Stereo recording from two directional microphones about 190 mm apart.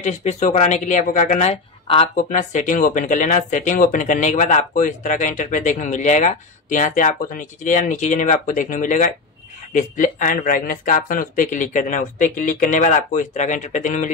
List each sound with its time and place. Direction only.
0.0 s speech: 35° left (ahead or behind)